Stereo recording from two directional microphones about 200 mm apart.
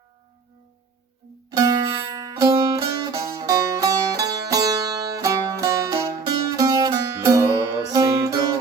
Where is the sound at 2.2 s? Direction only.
15° right (ahead or behind).